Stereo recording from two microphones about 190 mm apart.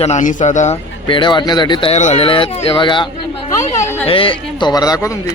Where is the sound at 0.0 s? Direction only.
40° left (ahead or behind).